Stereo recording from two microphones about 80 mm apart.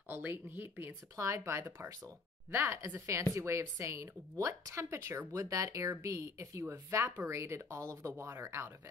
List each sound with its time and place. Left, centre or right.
0.1 s speech: right
1.1 s a woman's voice: right
5.3 s a woman's voice: right